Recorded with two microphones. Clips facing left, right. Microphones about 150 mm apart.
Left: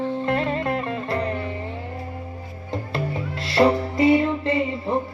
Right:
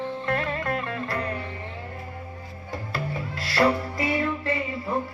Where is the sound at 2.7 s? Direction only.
25° left (ahead or behind).